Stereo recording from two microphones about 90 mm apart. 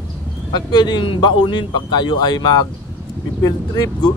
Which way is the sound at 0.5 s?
50° left (ahead or behind).